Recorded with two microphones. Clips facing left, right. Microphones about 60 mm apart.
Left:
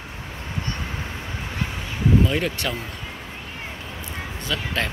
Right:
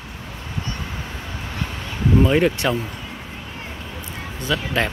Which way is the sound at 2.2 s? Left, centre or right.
Right.